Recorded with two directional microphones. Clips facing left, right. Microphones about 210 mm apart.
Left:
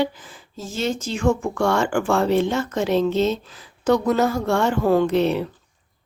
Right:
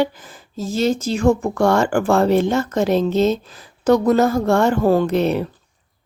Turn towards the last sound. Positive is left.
turn(degrees=-45)  # may be behind; listen again after turning